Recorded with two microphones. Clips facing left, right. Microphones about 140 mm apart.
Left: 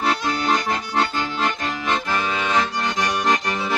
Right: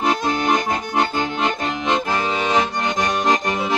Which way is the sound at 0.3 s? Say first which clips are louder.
Right 2 dB; 20° right (ahead or behind).